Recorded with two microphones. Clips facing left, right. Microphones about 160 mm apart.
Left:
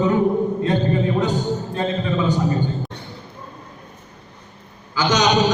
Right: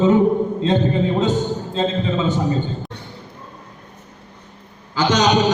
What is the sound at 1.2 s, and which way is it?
A man's voice, 20° right (ahead or behind).